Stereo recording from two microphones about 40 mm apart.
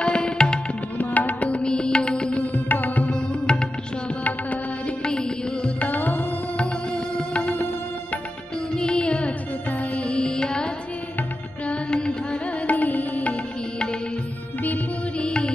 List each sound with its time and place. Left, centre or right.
0.0 s music: left
0.9 s music: left
1.6 s music: left
3.5 s music: left
4.2 s music: left
5.0 s music: left
5.8 s music: left
7.5 s music: left
8.7 s music: left
9.7 s music: left
10.0 s music: left
11.1 s music: left
12.6 s music: left
15.1 s music: left